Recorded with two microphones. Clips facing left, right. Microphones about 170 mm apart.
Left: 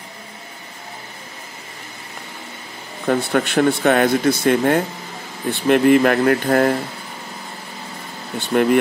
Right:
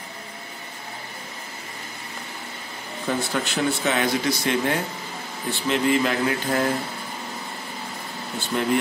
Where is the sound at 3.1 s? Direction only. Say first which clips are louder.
Left 7 dB; 60° left (ahead or behind).